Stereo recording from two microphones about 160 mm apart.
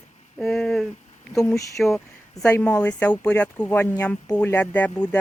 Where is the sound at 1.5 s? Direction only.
20° left (ahead or behind).